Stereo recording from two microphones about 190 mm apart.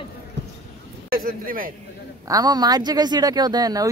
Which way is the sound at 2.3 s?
20° right (ahead or behind).